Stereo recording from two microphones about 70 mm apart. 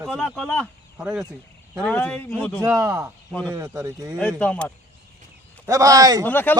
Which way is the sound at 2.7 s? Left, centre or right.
Right.